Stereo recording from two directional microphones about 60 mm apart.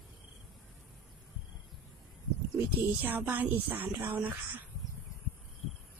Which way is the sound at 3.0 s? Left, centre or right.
Right.